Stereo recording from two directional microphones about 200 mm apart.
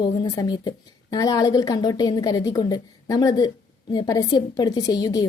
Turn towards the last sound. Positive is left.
turn(degrees=20)  # may be behind; listen again after turning